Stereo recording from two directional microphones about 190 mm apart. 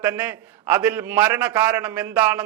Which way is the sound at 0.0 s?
10° right (ahead or behind).